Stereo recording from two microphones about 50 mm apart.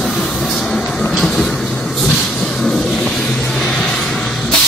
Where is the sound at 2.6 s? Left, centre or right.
Centre.